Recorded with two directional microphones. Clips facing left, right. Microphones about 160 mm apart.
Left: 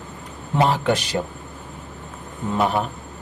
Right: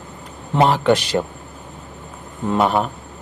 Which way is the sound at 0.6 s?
70° right (ahead or behind).